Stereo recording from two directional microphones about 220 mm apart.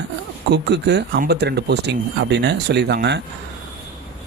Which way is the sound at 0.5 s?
50° right (ahead or behind).